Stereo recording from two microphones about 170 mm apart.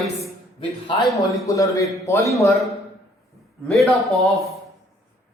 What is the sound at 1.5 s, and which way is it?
A man's voice, 20° left (ahead or behind).